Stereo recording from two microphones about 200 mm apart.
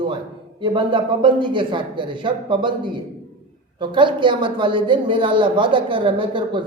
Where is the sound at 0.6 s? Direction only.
25° right (ahead or behind).